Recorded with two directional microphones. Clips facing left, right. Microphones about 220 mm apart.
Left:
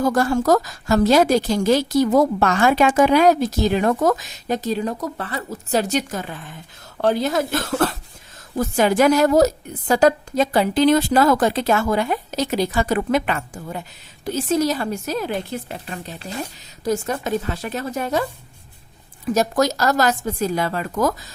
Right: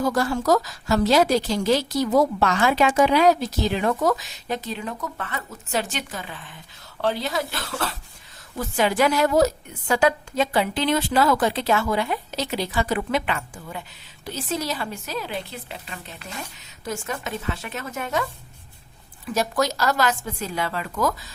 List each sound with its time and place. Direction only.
0.0 s a woman's voice: 50° left (ahead or behind)
16.1 s speech: 35° left (ahead or behind)
19.3 s a woman's voice: 45° left (ahead or behind)